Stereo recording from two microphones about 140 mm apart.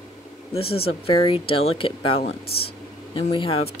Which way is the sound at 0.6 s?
45° left (ahead or behind).